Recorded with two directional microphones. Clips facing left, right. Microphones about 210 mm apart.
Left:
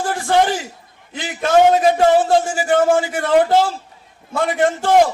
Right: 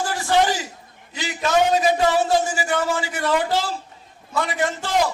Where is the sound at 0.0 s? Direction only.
50° left (ahead or behind).